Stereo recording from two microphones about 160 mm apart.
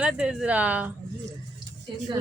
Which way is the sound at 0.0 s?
5° right (ahead or behind).